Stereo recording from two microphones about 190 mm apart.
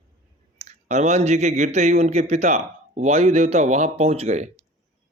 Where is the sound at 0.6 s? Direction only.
35° right (ahead or behind).